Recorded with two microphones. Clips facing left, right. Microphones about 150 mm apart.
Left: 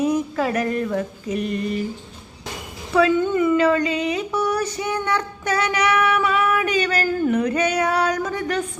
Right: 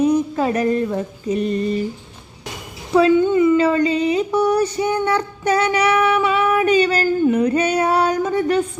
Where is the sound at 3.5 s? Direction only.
30° right (ahead or behind).